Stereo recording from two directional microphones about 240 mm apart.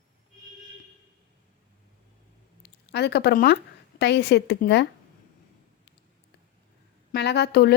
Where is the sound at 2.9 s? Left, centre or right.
Left.